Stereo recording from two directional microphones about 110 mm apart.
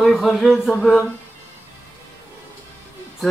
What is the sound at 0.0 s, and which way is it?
Speech, centre (ahead or behind).